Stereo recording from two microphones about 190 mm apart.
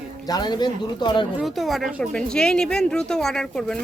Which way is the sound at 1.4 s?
Centre (ahead or behind).